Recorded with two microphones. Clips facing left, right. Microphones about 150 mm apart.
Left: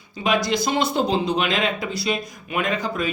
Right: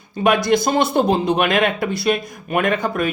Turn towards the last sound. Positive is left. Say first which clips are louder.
# right 5 dB
turn(degrees=-60)  # may be behind; listen again after turning